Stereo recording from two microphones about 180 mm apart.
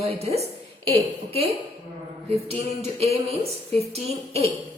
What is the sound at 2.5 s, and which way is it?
A woman's voice, 35° right (ahead or behind).